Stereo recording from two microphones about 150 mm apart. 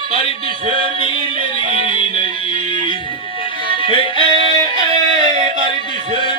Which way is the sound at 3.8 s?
35° right (ahead or behind).